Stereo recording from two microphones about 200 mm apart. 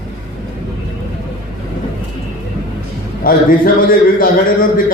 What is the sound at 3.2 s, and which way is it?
A man's voice, 45° left (ahead or behind).